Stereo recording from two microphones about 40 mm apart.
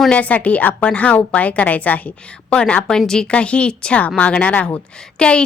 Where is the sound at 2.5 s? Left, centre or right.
Left.